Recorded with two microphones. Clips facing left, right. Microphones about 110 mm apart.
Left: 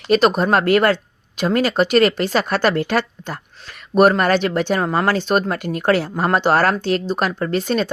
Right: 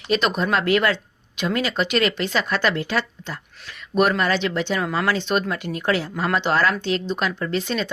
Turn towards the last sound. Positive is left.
turn(degrees=45)  # may be behind; listen again after turning